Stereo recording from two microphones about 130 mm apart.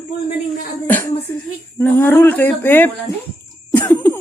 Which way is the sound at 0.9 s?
15° left (ahead or behind).